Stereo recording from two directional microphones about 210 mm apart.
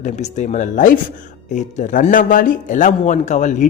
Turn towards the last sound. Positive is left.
turn(degrees=35)  # may be behind; listen again after turning